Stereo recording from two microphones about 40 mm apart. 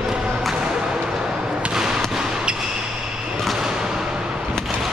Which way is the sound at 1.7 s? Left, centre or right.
Centre.